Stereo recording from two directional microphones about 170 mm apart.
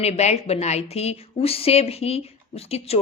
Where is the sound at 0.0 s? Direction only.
40° left (ahead or behind).